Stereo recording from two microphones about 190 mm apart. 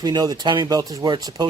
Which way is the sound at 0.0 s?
20° right (ahead or behind).